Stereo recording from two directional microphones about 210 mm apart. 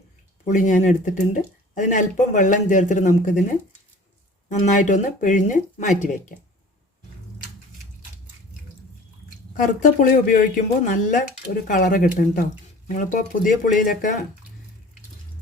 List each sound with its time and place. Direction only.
0.4 s speech: 35° left (ahead or behind)
9.8 s speech: 40° left (ahead or behind)